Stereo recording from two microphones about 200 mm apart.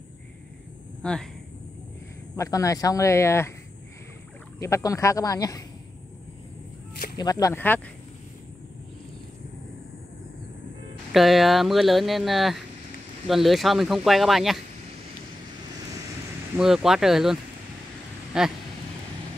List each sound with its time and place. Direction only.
1.0 s speech: 5° left (ahead or behind)
2.3 s speech: 15° left (ahead or behind)
4.6 s speech: 15° left (ahead or behind)
7.2 s speech: 20° left (ahead or behind)
11.1 s speech: centre (ahead or behind)
16.5 s speech: centre (ahead or behind)